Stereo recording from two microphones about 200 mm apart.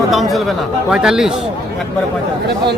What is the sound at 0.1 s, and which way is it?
Speech, centre (ahead or behind).